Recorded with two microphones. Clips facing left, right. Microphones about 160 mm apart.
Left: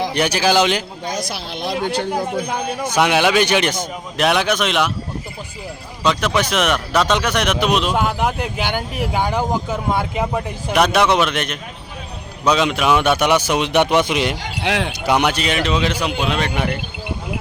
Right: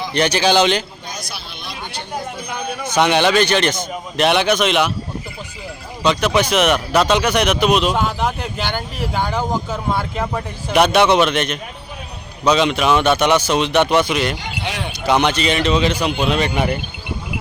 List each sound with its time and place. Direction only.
0.1 s speech: 5° left (ahead or behind)
1.0 s speech: 90° left
2.9 s speech: 5° left (ahead or behind)
4.3 s speech: centre (ahead or behind)
6.0 s speech: centre (ahead or behind)
7.9 s speech: 10° left (ahead or behind)
10.7 s speech: centre (ahead or behind); by 14.3 s 15° left (ahead or behind)
14.6 s speech: 90° left
15.0 s speech: 10° left (ahead or behind)